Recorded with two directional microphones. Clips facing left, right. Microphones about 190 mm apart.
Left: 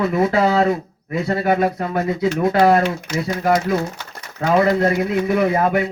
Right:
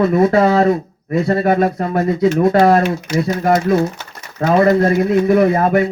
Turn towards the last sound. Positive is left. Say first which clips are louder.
# right 4 dB
turn(degrees=-45)  # may be behind; listen again after turning